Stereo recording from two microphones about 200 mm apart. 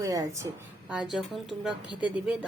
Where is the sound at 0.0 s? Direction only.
15° right (ahead or behind).